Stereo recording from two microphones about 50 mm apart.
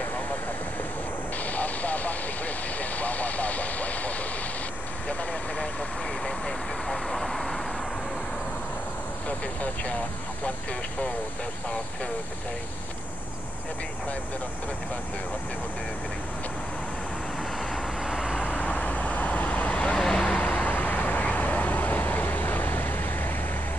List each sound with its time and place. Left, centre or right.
1.4 s vehicle: left
6.2 s vehicle: centre
18.0 s vehicle: centre
18.4 s vehicle: left
20.5 s vehicle: left